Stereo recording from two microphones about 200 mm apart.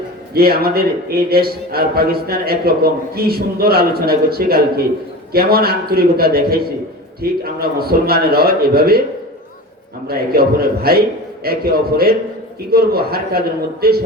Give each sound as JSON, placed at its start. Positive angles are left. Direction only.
{"t": 0.3, "sound": "a man's voice", "side_deg": -50}
{"t": 10.1, "sound": "a man's voice", "side_deg": -50}